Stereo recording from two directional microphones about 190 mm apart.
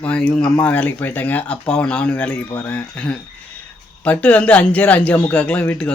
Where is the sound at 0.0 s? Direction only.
5° left (ahead or behind).